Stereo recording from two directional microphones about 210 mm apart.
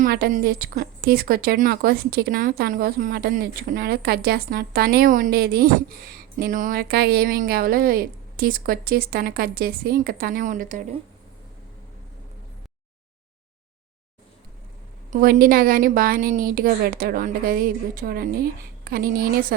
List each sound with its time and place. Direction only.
0.0 s a woman's voice: 40° right (ahead or behind)
15.1 s a woman's voice: 40° right (ahead or behind)